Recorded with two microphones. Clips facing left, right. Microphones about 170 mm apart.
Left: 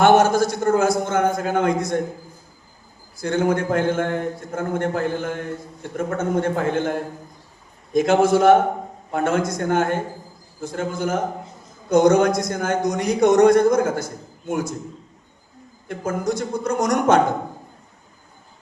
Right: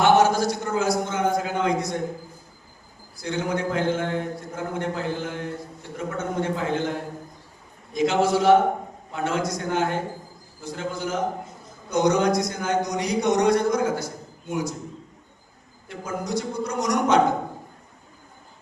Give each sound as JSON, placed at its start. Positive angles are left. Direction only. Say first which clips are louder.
{"t": 0.0, "sound": "a man's voice", "louder": "left 3 dB", "side_deg": 50}
{"t": 3.2, "sound": "speech", "louder": "left 6 dB", "side_deg": 50}
{"t": 7.9, "sound": "speech", "louder": "left 5 dB", "side_deg": 50}
{"t": 15.9, "sound": "speech", "louder": "left 5 dB", "side_deg": 50}